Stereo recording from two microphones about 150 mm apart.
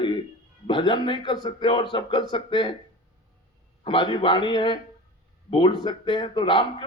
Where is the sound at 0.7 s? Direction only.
30° left (ahead or behind).